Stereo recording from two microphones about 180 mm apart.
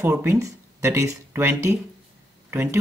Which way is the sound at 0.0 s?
15° right (ahead or behind).